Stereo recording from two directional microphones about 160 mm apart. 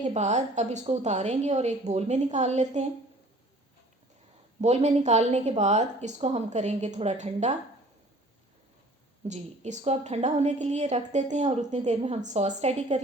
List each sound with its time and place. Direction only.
0.0 s a woman's voice: 45° right (ahead or behind)
4.6 s a woman's voice: 45° right (ahead or behind)
9.2 s a woman's voice: 45° right (ahead or behind)